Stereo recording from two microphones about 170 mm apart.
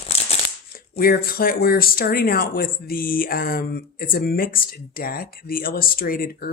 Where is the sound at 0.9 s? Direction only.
60° left (ahead or behind).